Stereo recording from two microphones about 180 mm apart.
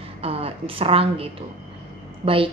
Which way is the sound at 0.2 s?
30° right (ahead or behind).